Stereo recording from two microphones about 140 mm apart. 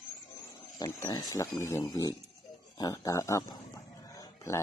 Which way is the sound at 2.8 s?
25° left (ahead or behind).